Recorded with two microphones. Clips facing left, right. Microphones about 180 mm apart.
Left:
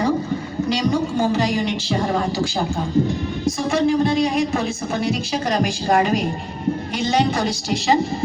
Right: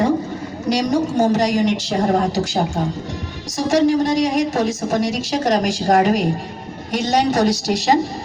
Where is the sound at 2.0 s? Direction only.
40° right (ahead or behind).